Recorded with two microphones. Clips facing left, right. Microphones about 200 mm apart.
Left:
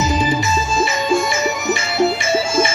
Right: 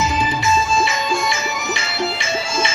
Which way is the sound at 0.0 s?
40° left (ahead or behind).